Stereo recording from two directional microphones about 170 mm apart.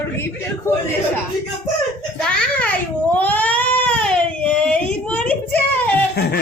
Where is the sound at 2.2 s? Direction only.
5° left (ahead or behind).